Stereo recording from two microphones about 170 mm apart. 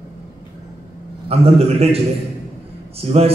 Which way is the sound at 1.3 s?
35° right (ahead or behind).